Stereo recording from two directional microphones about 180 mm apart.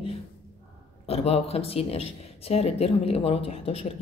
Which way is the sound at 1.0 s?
35° left (ahead or behind).